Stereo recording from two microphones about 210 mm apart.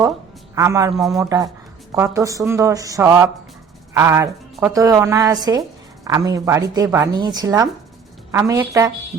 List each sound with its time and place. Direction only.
0.5 s speech: 15° right (ahead or behind)
0.9 s speech: centre (ahead or behind)
1.2 s speech: 15° right (ahead or behind)